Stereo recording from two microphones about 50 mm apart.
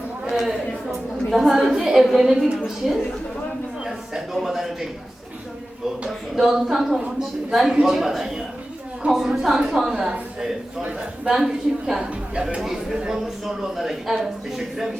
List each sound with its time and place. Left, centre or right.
0.3 s a sound: centre
2.0 s speech: centre
4.4 s speech: centre
6.3 s speech: centre
12.3 s speech: centre
13.2 s speech: centre